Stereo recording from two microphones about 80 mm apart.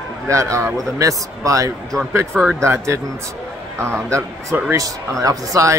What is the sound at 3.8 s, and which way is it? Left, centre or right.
Speech, right.